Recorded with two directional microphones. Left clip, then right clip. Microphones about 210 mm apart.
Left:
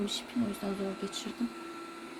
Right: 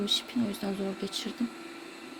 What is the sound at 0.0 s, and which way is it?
Speech, 30° right (ahead or behind).